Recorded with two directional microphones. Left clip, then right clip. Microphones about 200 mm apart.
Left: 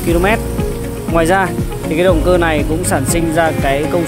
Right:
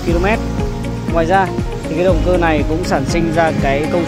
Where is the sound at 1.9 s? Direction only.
10° left (ahead or behind).